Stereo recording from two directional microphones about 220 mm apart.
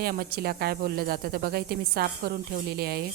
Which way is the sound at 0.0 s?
45° right (ahead or behind).